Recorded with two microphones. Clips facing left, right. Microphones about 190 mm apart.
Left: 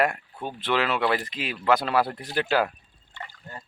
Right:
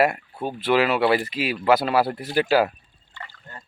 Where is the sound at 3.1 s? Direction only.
15° left (ahead or behind).